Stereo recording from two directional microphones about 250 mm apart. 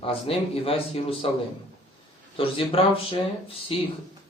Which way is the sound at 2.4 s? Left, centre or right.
Left.